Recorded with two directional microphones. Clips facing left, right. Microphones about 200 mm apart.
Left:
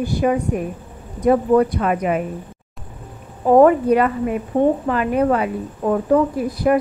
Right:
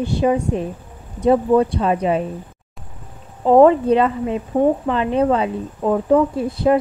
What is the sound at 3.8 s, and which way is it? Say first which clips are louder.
A woman's voice: even; 25° right (ahead or behind).